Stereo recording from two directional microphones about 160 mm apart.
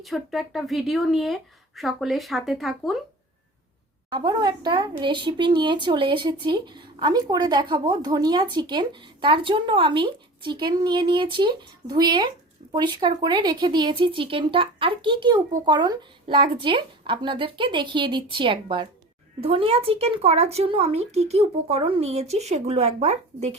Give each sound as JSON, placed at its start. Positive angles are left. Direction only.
{"t": 0.0, "sound": "speech", "side_deg": 0}
{"t": 4.1, "sound": "speech", "side_deg": -30}